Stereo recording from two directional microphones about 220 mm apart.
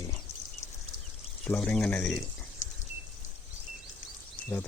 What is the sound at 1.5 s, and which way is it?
Speech, 5° left (ahead or behind).